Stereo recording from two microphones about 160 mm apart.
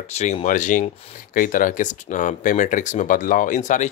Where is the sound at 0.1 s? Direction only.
45° left (ahead or behind).